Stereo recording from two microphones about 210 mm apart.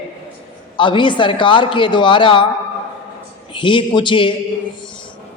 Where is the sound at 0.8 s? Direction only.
25° left (ahead or behind).